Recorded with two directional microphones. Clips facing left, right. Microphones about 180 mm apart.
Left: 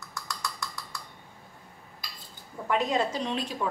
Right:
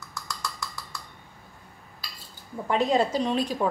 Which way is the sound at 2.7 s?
35° right (ahead or behind).